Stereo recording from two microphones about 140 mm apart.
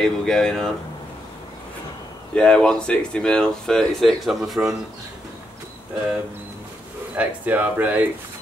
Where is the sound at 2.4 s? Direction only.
5° left (ahead or behind).